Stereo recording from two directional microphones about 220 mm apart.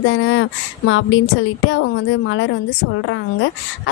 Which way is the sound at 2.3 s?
60° left (ahead or behind).